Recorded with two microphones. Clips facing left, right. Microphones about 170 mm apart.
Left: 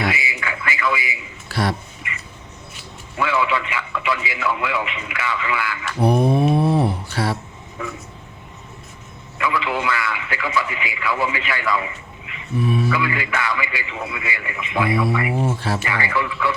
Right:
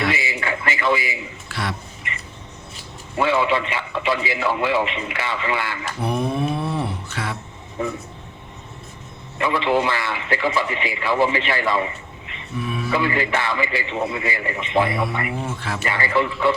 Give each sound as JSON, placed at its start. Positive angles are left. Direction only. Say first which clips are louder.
{"t": 0.0, "sound": "a sound", "louder": "right 1 dB", "side_deg": -30}
{"t": 1.5, "sound": "a sound", "louder": "left 6 dB", "side_deg": 40}
{"t": 3.2, "sound": "a man's voice", "louder": "right 2 dB", "side_deg": -25}
{"t": 6.0, "sound": "mantra", "louder": "left 6 dB", "side_deg": 35}
{"t": 7.8, "sound": "a man's voice", "louder": "right 5 dB", "side_deg": -30}
{"t": 9.4, "sound": "a man's voice", "louder": "right 3 dB", "side_deg": -30}
{"t": 12.6, "sound": "speech", "louder": "left 7 dB", "side_deg": 35}
{"t": 12.9, "sound": "a man's voice", "louder": "right 2 dB", "side_deg": -30}
{"t": 15.4, "sound": "speech", "louder": "left 5 dB", "side_deg": 35}
{"t": 15.8, "sound": "a man's voice", "louder": "right 2 dB", "side_deg": -30}